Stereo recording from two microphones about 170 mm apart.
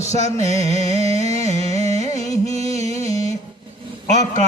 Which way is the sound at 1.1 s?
45° left (ahead or behind).